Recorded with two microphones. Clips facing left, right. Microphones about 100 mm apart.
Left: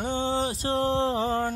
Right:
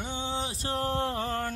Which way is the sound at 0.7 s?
25° left (ahead or behind).